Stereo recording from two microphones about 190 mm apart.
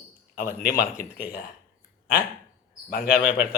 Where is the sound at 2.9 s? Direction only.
50° left (ahead or behind).